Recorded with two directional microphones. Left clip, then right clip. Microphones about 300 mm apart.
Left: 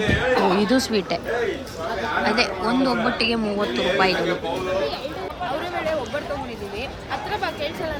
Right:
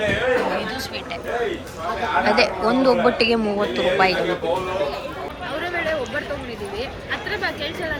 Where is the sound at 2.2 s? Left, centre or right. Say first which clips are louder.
Right 4 dB; centre.